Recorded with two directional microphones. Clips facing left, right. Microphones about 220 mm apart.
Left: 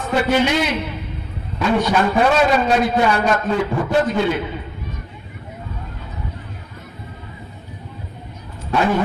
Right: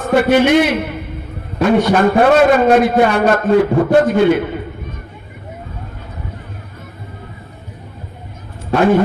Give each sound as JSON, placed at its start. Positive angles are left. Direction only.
{"t": 0.1, "sound": "a man's voice", "side_deg": -55}
{"t": 8.7, "sound": "a man's voice", "side_deg": -45}